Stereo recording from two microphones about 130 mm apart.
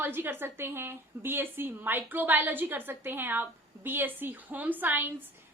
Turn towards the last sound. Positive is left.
turn(degrees=-15)  # may be behind; listen again after turning